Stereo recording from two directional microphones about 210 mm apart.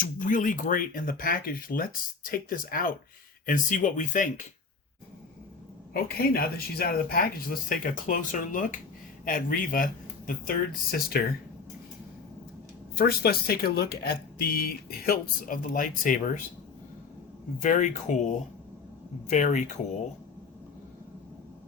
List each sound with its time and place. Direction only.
0.0 s speech: 40° left (ahead or behind)
5.9 s speech: 45° left (ahead or behind)
13.0 s speech: 50° left (ahead or behind)
17.6 s speech: 35° left (ahead or behind)